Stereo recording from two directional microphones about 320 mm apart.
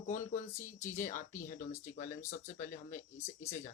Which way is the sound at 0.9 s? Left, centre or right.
Left.